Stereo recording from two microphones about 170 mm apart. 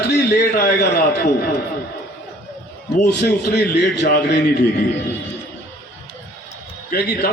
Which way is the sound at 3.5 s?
85° left.